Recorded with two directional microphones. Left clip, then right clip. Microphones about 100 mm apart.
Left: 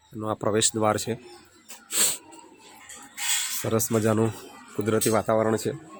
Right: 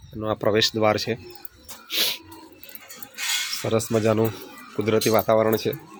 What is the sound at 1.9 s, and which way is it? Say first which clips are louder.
Dog: right 4 dB; 50° left (ahead or behind).